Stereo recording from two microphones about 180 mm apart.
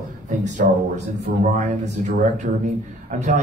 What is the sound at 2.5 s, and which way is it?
Speech, 55° right (ahead or behind).